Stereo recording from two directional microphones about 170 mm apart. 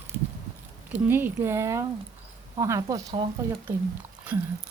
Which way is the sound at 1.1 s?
10° right (ahead or behind).